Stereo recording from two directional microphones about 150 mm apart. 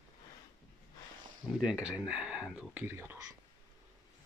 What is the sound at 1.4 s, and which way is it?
Speech, 5° right (ahead or behind).